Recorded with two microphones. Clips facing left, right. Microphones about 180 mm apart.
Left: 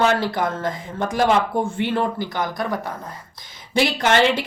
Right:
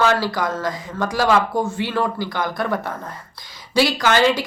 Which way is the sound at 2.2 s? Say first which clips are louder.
Right 1 dB; 20° left (ahead or behind).